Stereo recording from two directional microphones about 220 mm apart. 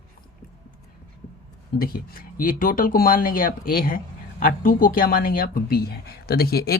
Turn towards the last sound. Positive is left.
turn(degrees=45)  # may be behind; listen again after turning